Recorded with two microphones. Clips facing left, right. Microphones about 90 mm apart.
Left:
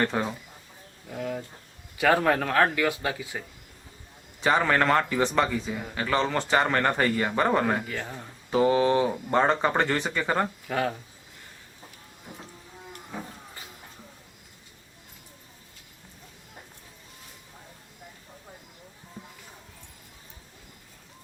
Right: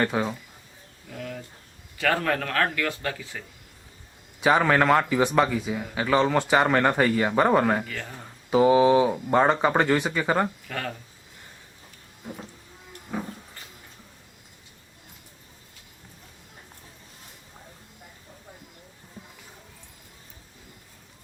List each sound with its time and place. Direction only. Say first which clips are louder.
0.0 s speech: right 2 dB; 5° right (ahead or behind)
1.1 s speech: left 4 dB; 15° left (ahead or behind)
4.4 s speech: right 3 dB; 5° right (ahead or behind)
7.9 s speech: left 2 dB; 15° left (ahead or behind)
8.2 s speech: right 3 dB; 10° right (ahead or behind)
10.7 s speech: left 5 dB; 15° left (ahead or behind)